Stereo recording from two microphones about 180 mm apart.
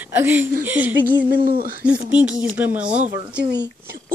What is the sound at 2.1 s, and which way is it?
Speech, 10° right (ahead or behind).